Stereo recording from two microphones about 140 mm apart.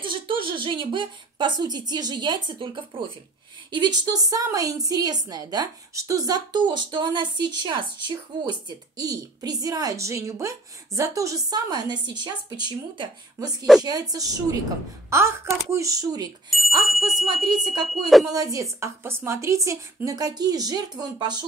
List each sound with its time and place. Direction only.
0.0 s a woman's voice: 35° right (ahead or behind)
16.4 s speech: centre (ahead or behind)
18.2 s a woman's voice: 25° right (ahead or behind)